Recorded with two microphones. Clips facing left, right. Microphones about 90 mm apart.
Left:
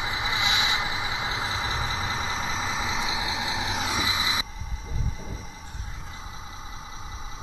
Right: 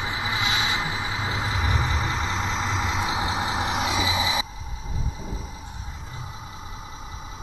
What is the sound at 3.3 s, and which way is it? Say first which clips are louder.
Vehicle: right 4 dB; 45° right (ahead or behind).